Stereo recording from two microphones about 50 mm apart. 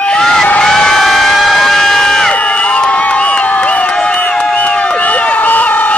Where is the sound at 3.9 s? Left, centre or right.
Left.